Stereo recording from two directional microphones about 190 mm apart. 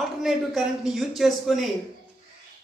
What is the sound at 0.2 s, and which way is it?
Speech, centre (ahead or behind).